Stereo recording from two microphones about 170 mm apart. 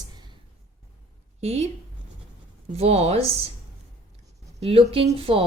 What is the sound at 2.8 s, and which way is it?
Speech, 35° right (ahead or behind).